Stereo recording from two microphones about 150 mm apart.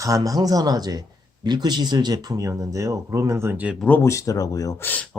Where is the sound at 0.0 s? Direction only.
20° right (ahead or behind).